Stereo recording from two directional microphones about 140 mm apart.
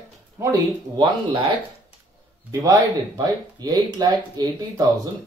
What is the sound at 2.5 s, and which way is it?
Speech, 25° right (ahead or behind).